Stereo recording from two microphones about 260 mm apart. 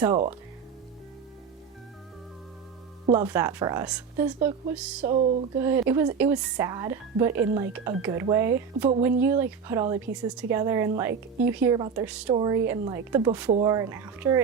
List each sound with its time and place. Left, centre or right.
3.1 s speech: centre
5.0 s speech: right
5.5 s speech: centre
12.3 s speech: centre